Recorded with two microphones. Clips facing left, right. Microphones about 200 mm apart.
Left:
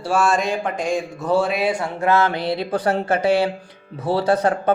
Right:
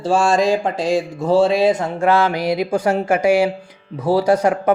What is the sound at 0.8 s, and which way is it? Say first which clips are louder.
Speech: right 4 dB; 30° right (ahead or behind).